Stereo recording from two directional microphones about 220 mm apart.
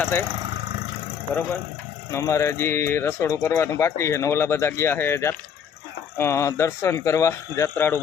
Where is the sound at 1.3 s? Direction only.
5° left (ahead or behind).